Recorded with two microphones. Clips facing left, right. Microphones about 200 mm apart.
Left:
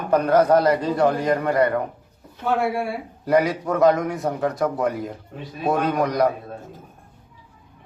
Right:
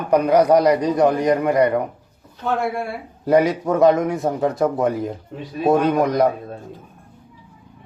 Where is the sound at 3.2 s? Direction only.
25° right (ahead or behind).